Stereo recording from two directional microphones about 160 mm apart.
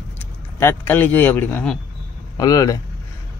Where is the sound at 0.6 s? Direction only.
15° left (ahead or behind).